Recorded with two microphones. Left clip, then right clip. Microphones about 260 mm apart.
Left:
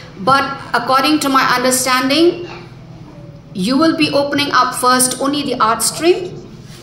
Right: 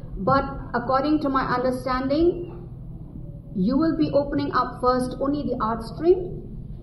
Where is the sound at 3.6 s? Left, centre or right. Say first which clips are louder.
Left 9 dB; left.